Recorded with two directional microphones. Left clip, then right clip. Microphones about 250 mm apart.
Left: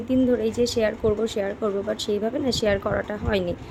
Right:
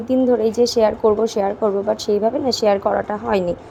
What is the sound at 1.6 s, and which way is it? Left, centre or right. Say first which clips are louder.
A woman's voice: right 7 dB; centre.